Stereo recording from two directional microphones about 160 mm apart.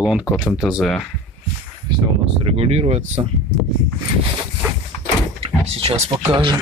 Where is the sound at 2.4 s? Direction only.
40° right (ahead or behind).